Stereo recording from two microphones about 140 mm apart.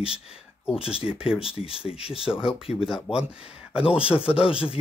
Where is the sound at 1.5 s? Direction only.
40° left (ahead or behind).